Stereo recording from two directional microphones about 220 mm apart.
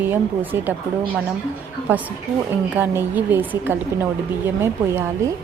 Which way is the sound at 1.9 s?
10° right (ahead or behind).